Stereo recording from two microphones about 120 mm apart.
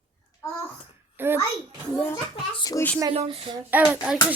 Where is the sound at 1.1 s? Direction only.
20° right (ahead or behind).